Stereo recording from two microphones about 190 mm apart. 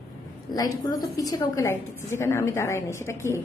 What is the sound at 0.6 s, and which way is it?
A woman's voice, 20° left (ahead or behind).